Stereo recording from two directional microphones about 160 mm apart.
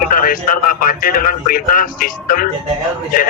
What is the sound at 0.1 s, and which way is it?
Speech, 60° left (ahead or behind).